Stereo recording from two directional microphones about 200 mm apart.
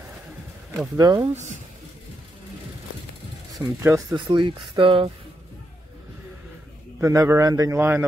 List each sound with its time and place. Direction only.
0.9 s a man's voice: 20° right (ahead or behind)
1.3 s speech: 35° right (ahead or behind)
3.5 s speech: 15° right (ahead or behind)
7.0 s a man's voice: 15° right (ahead or behind)